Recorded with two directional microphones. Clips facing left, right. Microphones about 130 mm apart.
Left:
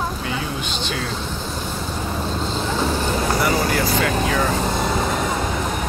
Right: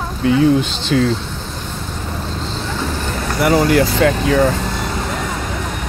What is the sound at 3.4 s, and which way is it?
Speech, 90° right.